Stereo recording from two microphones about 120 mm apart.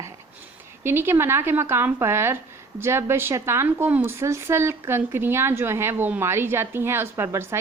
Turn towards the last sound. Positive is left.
turn(degrees=-25)  # may be behind; listen again after turning